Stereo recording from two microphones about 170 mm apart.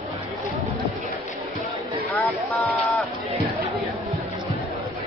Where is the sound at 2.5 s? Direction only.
10° left (ahead or behind).